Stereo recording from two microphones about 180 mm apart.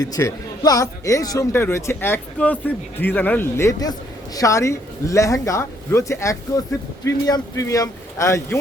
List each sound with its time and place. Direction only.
0.0 s a man's voice: 20° left (ahead or behind)